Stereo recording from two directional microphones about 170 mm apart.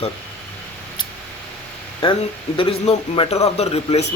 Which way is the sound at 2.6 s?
35° left (ahead or behind).